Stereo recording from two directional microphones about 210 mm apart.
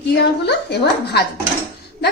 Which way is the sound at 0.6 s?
50° left (ahead or behind).